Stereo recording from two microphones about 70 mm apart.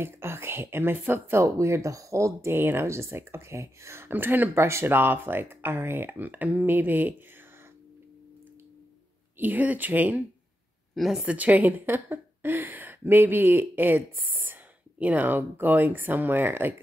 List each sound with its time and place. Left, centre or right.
0.0 s speech: right
1.4 s speech: right
2.5 s speech: right
4.1 s a woman's voice: right
9.4 s a woman's voice: right
11.0 s a woman's voice: centre
11.2 s a woman's voice: right